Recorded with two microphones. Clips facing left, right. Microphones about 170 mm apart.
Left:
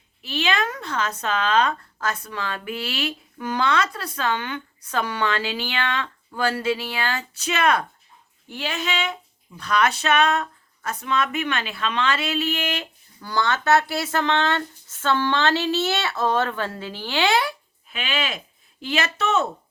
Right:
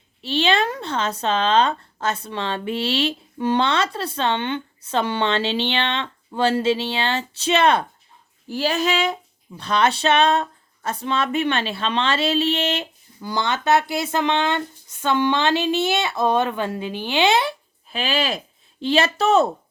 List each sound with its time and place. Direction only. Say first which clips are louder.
0.2 s speech: right 4 dB; 30° right (ahead or behind)
17.8 s speech: right 5 dB; 35° right (ahead or behind)